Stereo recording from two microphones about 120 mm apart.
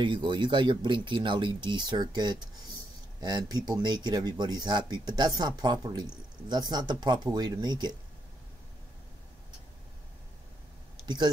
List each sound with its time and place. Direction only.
0.0 s speech: 40° right (ahead or behind)